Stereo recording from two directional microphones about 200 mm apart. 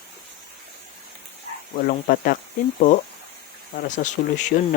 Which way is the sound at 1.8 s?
50° left (ahead or behind).